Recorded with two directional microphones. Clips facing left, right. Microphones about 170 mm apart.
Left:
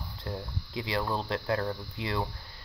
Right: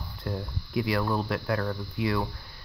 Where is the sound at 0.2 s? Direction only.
20° left (ahead or behind).